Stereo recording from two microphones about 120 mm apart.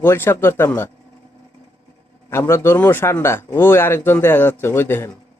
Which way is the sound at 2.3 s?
25° left (ahead or behind).